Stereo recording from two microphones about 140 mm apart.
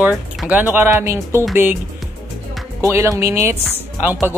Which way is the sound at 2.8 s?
20° right (ahead or behind).